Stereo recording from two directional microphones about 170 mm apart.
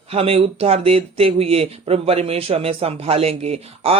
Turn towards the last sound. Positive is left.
turn(degrees=-35)  # may be behind; listen again after turning